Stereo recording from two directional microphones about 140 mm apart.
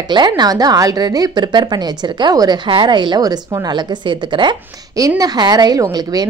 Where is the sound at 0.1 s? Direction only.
30° right (ahead or behind).